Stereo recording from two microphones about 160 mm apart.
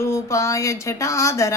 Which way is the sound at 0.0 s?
20° left (ahead or behind).